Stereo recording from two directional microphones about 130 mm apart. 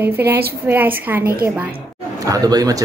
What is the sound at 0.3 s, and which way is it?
Speech, 15° right (ahead or behind).